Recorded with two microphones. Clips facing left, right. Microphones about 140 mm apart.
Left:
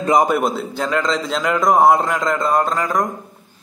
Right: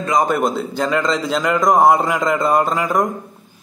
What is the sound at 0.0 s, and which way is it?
Speech, 25° left (ahead or behind).